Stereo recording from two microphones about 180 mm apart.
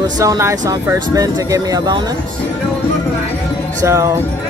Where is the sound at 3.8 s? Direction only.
15° right (ahead or behind).